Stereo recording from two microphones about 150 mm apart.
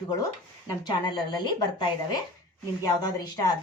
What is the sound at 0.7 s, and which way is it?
A woman's voice, 30° left (ahead or behind).